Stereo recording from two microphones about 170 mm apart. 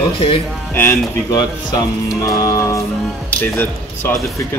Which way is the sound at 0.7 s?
10° left (ahead or behind).